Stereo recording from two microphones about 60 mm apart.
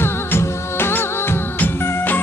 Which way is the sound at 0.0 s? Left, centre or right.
Left.